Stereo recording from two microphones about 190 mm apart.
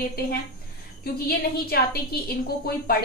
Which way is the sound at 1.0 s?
55° left (ahead or behind).